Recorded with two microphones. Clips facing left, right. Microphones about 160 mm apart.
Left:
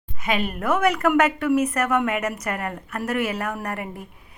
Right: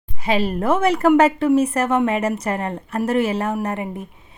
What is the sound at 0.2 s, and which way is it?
Speech, 30° right (ahead or behind).